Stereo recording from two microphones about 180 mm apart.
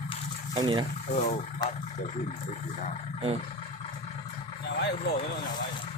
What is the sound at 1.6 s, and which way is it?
Speech, 25° left (ahead or behind).